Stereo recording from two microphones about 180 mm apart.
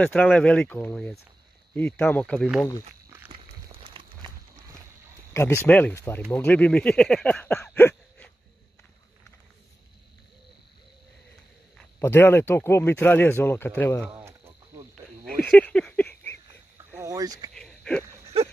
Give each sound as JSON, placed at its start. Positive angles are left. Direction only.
{"t": 0.0, "sound": "speech", "side_deg": 5}
{"t": 3.8, "sound": "run", "side_deg": -30}
{"t": 5.3, "sound": "speech", "side_deg": 15}
{"t": 12.0, "sound": "speech", "side_deg": 15}
{"t": 14.7, "sound": "cricket", "side_deg": -15}
{"t": 15.4, "sound": "a sound", "side_deg": 5}
{"t": 17.0, "sound": "speech", "side_deg": -20}
{"t": 17.6, "sound": "a sound", "side_deg": 5}